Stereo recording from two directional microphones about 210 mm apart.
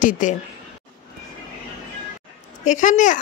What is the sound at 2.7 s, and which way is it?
Speech, 35° left (ahead or behind).